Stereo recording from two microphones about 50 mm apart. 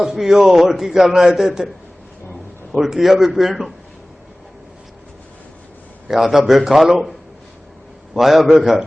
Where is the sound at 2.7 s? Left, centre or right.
Centre.